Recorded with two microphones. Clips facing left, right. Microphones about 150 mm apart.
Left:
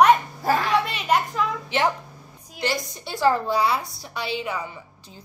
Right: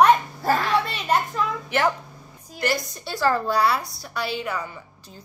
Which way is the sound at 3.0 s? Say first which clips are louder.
Left 2 dB; 20° left (ahead or behind).